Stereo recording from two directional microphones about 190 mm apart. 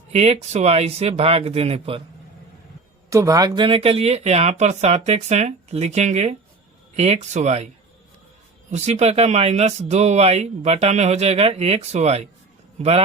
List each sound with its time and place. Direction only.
0.1 s speech: 35° right (ahead or behind)
3.1 s speech: 15° right (ahead or behind); by 7.7 s 35° right (ahead or behind)
8.7 s speech: 35° right (ahead or behind)